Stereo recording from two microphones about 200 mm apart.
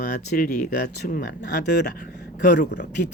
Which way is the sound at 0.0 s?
50° left (ahead or behind).